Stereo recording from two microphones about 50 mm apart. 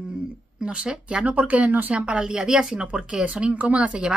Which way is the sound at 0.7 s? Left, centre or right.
Right.